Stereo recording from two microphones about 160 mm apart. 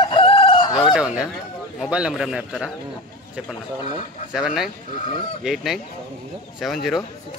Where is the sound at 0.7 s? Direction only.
5° right (ahead or behind).